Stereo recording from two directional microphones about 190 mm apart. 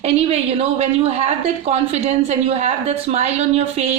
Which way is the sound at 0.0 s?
35° right (ahead or behind).